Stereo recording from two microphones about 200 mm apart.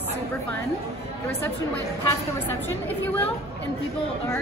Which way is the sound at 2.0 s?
10° left (ahead or behind).